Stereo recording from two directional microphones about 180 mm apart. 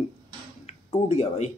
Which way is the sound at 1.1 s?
35° left (ahead or behind).